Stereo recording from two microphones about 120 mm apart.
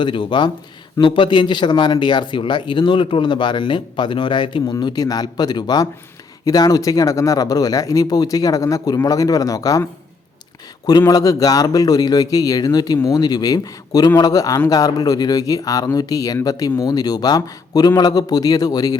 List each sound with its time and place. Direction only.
0.0 s speech: 45° left (ahead or behind)
11.1 s speech: 30° left (ahead or behind)